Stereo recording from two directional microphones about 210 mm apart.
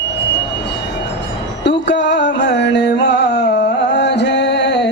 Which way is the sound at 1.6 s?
55° left (ahead or behind).